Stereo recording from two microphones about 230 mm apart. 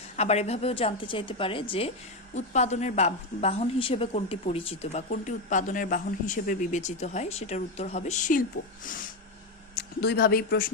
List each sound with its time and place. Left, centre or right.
0.2 s a woman's voice: left